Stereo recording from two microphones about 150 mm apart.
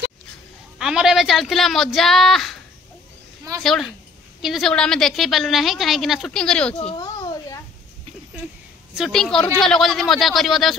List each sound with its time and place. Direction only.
0.7 s a woman's voice: 5° right (ahead or behind)
3.6 s a woman's voice: centre (ahead or behind)
7.0 s a sound: 25° left (ahead or behind)
8.9 s a woman's voice: centre (ahead or behind)